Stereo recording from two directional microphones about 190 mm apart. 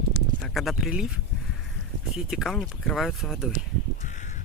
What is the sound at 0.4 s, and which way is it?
Speech, centre (ahead or behind).